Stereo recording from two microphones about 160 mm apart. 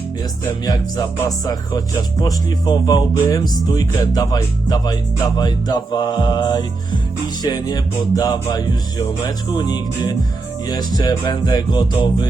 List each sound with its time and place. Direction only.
0.6 s music: 25° left (ahead or behind)
2.2 s music: 25° left (ahead or behind)